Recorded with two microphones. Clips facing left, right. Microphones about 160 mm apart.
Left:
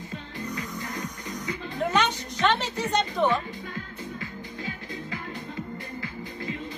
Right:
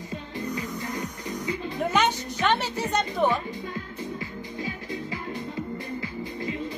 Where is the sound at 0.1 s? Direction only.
20° right (ahead or behind).